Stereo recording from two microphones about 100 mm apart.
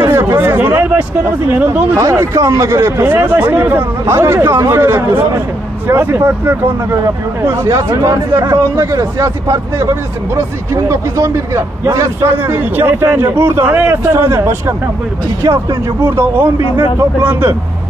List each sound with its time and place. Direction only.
0.0 s a sound: 25° right (ahead or behind)
2.0 s speech: 30° right (ahead or behind)
7.4 s speech: 35° right (ahead or behind)